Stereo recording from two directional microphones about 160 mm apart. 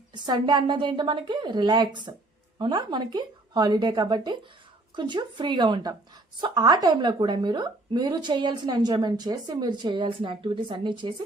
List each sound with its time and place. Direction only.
0.1 s a woman's voice: 25° right (ahead or behind)